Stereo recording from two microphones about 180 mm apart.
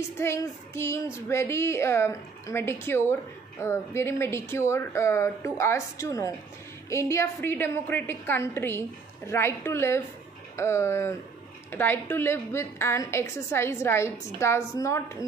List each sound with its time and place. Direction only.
0.2 s a woman's voice: 15° left (ahead or behind)